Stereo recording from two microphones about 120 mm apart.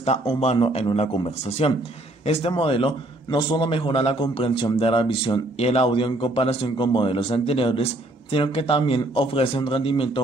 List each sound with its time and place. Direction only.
0.6 s a man's voice: 50° left (ahead or behind)
5.6 s speech: 55° left (ahead or behind)